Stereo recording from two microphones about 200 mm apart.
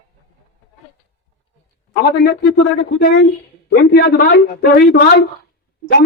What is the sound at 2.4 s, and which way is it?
A man's voice, 60° left (ahead or behind).